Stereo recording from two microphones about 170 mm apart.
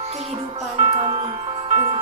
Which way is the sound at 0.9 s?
25° right (ahead or behind).